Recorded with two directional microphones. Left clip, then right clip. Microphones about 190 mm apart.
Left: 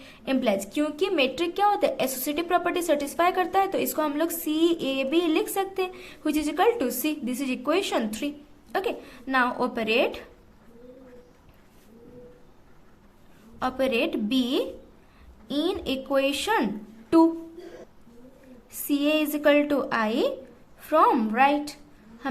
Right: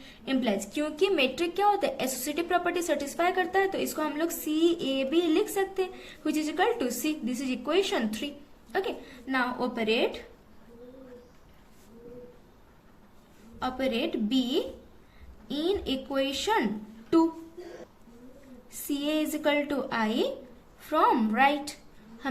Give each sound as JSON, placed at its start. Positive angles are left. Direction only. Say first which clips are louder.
{"t": 0.0, "sound": "a woman's voice", "louder": "left 4 dB", "side_deg": 25}
{"t": 13.6, "sound": "a woman's voice", "louder": "left 5 dB", "side_deg": 30}
{"t": 18.7, "sound": "a woman's voice", "louder": "left 6 dB", "side_deg": 25}